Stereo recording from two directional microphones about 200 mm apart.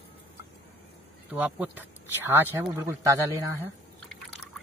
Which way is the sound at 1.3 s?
10° right (ahead or behind).